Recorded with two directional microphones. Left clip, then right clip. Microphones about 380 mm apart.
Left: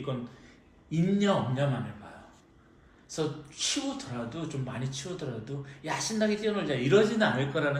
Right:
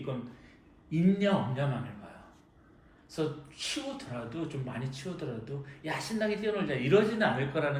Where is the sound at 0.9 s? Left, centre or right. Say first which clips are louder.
Left 1 dB; centre.